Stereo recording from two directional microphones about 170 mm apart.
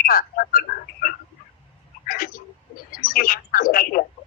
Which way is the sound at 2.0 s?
60° left (ahead or behind).